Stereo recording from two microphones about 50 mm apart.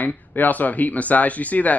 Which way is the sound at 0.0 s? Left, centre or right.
Left.